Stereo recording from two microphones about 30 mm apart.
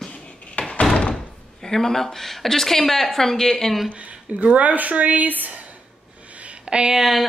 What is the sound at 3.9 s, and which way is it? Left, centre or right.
A woman's voice, right.